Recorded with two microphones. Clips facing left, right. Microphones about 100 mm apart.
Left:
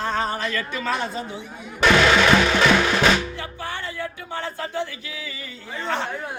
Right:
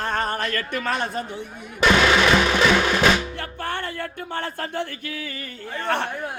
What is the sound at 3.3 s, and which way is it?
Speech, 55° right (ahead or behind).